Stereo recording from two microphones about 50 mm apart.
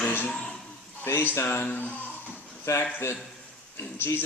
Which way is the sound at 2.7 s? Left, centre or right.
Left.